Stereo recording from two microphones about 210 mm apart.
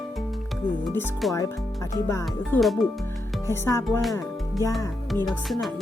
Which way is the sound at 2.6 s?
Centre (ahead or behind).